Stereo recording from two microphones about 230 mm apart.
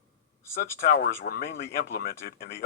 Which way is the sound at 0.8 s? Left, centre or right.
Left.